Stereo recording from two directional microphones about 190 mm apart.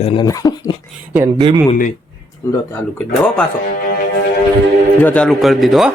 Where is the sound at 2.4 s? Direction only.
15° left (ahead or behind).